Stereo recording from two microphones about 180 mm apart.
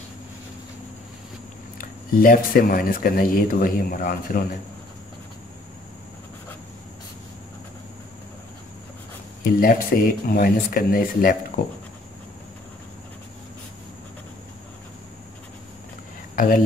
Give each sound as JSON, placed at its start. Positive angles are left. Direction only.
{"t": 1.8, "sound": "speech", "side_deg": 50}
{"t": 9.4, "sound": "speech", "side_deg": 50}
{"t": 16.3, "sound": "speech", "side_deg": 50}